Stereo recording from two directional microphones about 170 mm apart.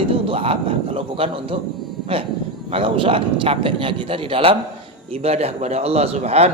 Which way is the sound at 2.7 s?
30° right (ahead or behind).